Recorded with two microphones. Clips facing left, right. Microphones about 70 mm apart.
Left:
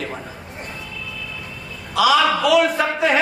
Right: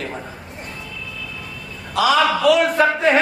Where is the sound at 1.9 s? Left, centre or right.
Right.